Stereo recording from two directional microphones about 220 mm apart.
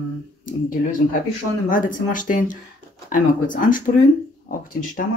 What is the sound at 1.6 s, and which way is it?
Speech, 40° left (ahead or behind).